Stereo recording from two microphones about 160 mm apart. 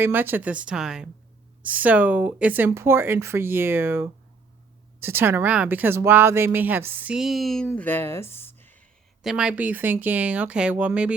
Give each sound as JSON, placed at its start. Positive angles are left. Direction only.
{"t": 0.0, "sound": "speech", "side_deg": -15}
{"t": 9.2, "sound": "speech", "side_deg": -5}